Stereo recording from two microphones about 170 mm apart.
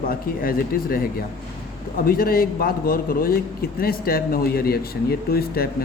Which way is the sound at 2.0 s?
60° left (ahead or behind).